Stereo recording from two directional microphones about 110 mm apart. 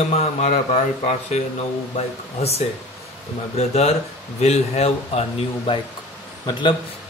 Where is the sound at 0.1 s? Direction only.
80° left.